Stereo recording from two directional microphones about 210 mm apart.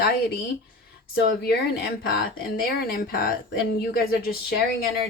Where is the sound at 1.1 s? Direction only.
45° left (ahead or behind).